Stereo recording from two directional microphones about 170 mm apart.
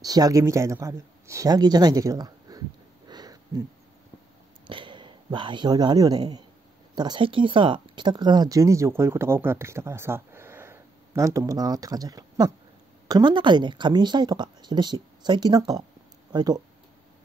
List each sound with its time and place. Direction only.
0.0 s speech: 20° right (ahead or behind)
3.1 s a sound: 25° right (ahead or behind)
4.6 s a man's voice: 30° right (ahead or behind)